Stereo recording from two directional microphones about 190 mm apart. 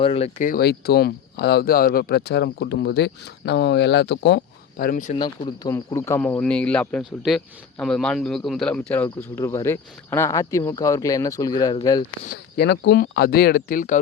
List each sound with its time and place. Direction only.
0.0 s speech: 30° left (ahead or behind)
0.3 s speech: 45° left (ahead or behind)
5.1 s speech: 25° left (ahead or behind); by 8.8 s centre (ahead or behind)
9.0 s speech: 15° left (ahead or behind)
12.3 s speech: 60° left (ahead or behind); by 14.0 s 45° left (ahead or behind)